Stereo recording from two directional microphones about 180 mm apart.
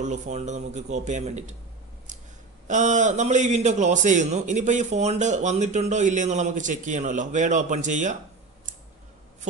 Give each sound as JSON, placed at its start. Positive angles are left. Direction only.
{"t": 0.0, "sound": "a man's voice", "side_deg": -40}
{"t": 2.7, "sound": "a man's voice", "side_deg": -40}